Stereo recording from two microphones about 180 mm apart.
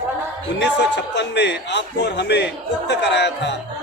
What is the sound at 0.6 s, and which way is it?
A man's voice, 75° left (ahead or behind).